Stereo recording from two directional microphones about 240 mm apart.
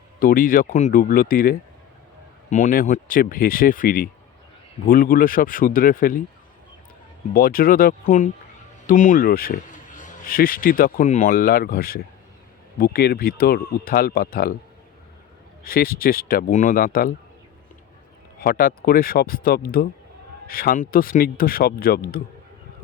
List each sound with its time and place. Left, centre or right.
0.2 s a man's voice: left
7.3 s a man's voice: left
15.6 s a man's voice: left
18.3 s a man's voice: left